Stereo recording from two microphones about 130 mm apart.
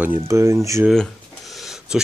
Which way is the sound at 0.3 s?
20° right (ahead or behind).